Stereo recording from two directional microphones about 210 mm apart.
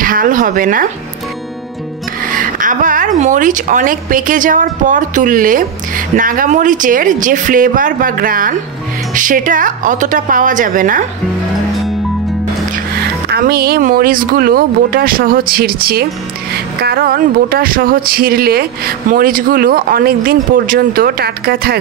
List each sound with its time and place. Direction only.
0.0 s speech: 40° right (ahead or behind)
2.3 s speech: 40° right (ahead or behind)
13.3 s speech: 45° right (ahead or behind)